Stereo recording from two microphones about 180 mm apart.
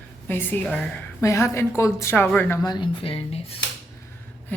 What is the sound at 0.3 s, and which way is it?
A woman's voice, 10° left (ahead or behind).